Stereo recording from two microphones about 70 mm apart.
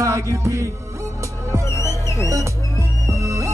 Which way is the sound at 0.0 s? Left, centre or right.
Right.